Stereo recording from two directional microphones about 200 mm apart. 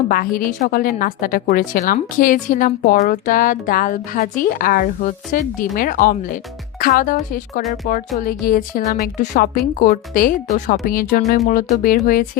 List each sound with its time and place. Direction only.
0.1 s a woman's voice: 45° left (ahead or behind)